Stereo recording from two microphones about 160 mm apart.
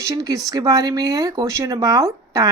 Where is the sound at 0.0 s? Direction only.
25° right (ahead or behind).